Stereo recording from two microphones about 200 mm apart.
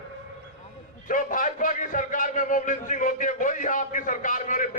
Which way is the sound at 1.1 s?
40° left (ahead or behind).